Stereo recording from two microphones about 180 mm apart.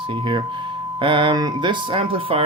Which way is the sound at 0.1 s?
25° right (ahead or behind).